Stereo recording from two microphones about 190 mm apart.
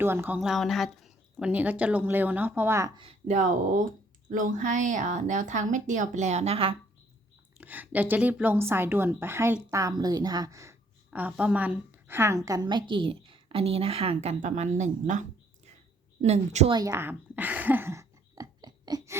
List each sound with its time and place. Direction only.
0.0 s a woman's voice: 10° right (ahead or behind)
0.3 s a woman's voice: centre (ahead or behind)
3.0 s a woman's voice: 35° right (ahead or behind)
7.6 s a woman's voice: 10° right (ahead or behind); by 16.7 s 35° right (ahead or behind)
16.7 s a sound: 15° right (ahead or behind)